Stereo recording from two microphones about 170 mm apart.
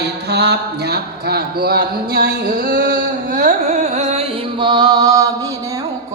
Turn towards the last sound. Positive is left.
turn(degrees=-20)  # may be behind; listen again after turning